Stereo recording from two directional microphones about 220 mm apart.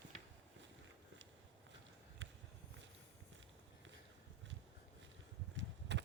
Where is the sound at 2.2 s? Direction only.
60° right (ahead or behind).